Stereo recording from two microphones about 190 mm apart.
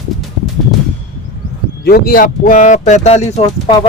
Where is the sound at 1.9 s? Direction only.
50° left (ahead or behind); by 3.8 s 30° left (ahead or behind).